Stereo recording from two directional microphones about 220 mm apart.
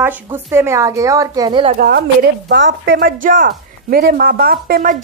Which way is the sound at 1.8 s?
45° right (ahead or behind).